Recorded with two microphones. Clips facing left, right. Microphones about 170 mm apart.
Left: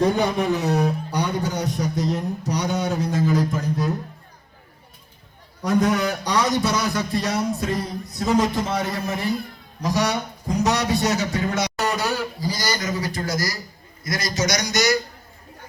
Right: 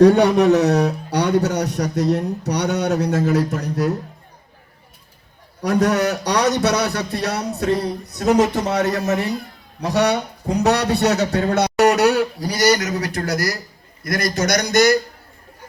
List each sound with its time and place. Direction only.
0.0 s a man's voice: 70° right (ahead or behind)
5.6 s a man's voice: 70° right (ahead or behind); by 14.9 s 55° right (ahead or behind)